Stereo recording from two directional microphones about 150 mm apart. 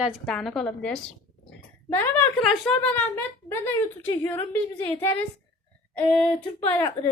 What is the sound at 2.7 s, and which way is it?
Speech, 10° left (ahead or behind).